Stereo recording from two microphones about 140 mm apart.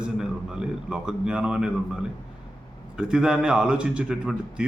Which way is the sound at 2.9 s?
5° right (ahead or behind).